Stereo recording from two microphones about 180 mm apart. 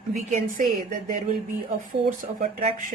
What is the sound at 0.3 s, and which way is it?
Speech, 45° right (ahead or behind).